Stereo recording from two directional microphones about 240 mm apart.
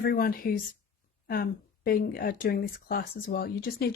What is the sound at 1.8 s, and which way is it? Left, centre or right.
Speech, left.